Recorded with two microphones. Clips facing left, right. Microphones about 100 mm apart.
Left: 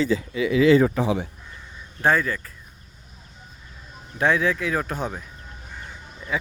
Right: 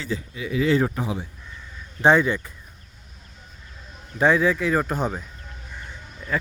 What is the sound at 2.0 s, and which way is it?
Speech, 20° right (ahead or behind).